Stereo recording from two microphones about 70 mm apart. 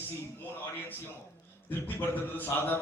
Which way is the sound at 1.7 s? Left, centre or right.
Left.